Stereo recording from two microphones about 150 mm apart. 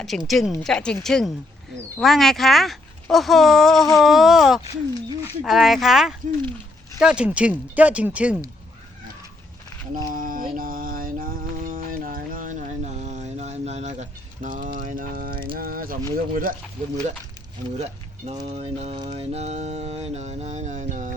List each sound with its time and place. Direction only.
0.0 s speech: centre (ahead or behind)
9.9 s mantra: 65° right (ahead or behind)
15.5 s speech: 75° right (ahead or behind)
18.5 s mantra: 40° right (ahead or behind)
18.9 s mantra: 30° right (ahead or behind)
19.3 s music: 45° right (ahead or behind)